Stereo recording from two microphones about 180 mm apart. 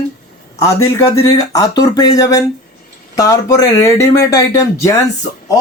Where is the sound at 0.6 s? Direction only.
15° left (ahead or behind).